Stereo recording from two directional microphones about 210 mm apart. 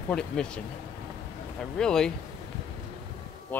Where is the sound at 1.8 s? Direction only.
5° left (ahead or behind).